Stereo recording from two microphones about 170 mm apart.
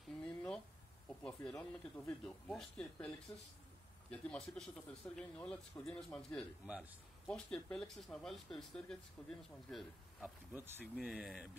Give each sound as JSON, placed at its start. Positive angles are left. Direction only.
{"t": 0.2, "sound": "a sound", "side_deg": 5}
{"t": 1.0, "sound": "speech", "side_deg": 5}
{"t": 3.3, "sound": "speech", "side_deg": 20}
{"t": 4.1, "sound": "speech", "side_deg": 5}
{"t": 6.6, "sound": "a man's voice", "side_deg": -10}
{"t": 7.2, "sound": "speech", "side_deg": 5}
{"t": 10.5, "sound": "speech", "side_deg": -10}